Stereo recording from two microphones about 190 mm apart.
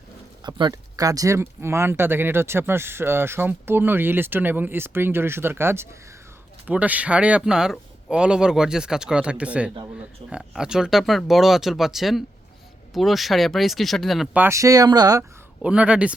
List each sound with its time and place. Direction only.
0.4 s speech: 20° right (ahead or behind); by 14.4 s centre (ahead or behind)
14.4 s speech: 15° right (ahead or behind)
15.6 s speech: 5° right (ahead or behind)